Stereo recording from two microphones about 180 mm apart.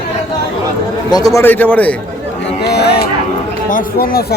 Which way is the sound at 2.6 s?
65° left (ahead or behind).